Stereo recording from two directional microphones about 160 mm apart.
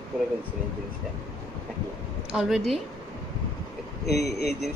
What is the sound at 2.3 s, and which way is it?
Speech, centre (ahead or behind).